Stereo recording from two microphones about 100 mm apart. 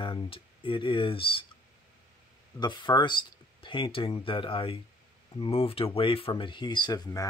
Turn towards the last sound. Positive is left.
turn(degrees=45)  # may be behind; listen again after turning